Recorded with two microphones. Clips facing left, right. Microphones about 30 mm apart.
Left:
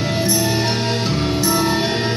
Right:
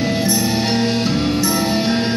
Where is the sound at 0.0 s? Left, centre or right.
Left.